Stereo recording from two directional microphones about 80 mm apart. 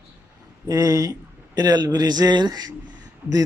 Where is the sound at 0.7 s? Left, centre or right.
Right.